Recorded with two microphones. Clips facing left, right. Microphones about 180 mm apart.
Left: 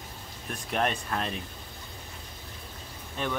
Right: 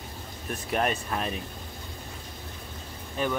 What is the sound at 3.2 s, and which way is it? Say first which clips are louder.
Speech: right 4 dB; 5° right (ahead or behind).